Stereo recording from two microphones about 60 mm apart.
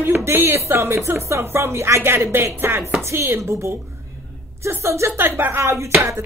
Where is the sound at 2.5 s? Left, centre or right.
Right.